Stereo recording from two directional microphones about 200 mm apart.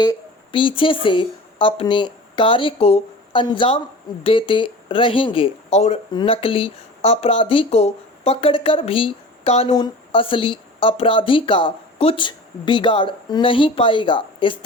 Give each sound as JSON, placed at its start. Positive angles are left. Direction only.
{"t": 0.0, "sound": "speech", "side_deg": 25}